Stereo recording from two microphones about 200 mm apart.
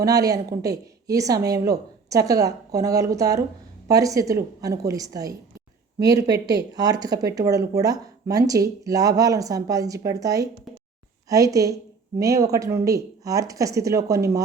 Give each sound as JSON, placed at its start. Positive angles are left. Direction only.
{"t": 0.0, "sound": "speech", "side_deg": -15}